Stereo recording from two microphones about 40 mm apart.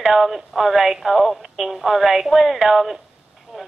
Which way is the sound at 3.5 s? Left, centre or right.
Centre.